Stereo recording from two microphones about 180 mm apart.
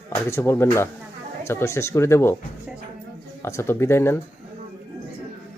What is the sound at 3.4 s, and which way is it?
Speech, 15° left (ahead or behind).